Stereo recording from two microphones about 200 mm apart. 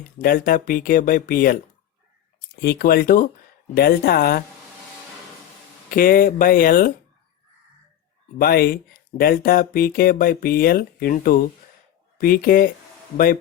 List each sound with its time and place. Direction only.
0.2 s speech: 45° left (ahead or behind)
2.6 s speech: 50° left (ahead or behind)
5.9 s speech: 45° left (ahead or behind)
8.4 s speech: 50° left (ahead or behind)